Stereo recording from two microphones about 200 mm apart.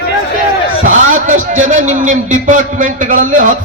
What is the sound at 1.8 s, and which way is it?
A man's voice, 40° right (ahead or behind).